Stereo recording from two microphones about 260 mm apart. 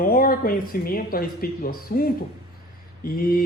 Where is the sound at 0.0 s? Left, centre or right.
Left.